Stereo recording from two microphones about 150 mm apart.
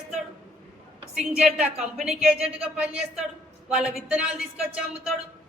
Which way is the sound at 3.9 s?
5° right (ahead or behind).